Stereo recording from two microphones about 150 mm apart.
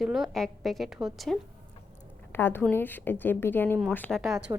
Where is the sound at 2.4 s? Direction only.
15° left (ahead or behind).